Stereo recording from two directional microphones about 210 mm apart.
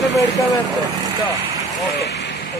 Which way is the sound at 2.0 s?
50° left (ahead or behind).